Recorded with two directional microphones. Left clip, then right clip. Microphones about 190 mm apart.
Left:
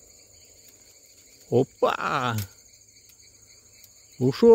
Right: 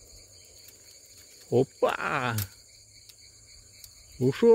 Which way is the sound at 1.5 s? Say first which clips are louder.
Left 2 dB; 20° left (ahead or behind).